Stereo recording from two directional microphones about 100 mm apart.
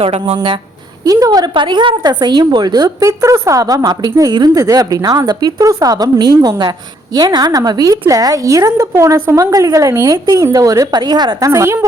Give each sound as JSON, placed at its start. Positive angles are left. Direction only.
{"t": 0.0, "sound": "speech", "side_deg": -75}
{"t": 0.3, "sound": "speech", "side_deg": -55}
{"t": 1.0, "sound": "a woman's voice", "side_deg": -35}
{"t": 1.5, "sound": "a woman's voice", "side_deg": -50}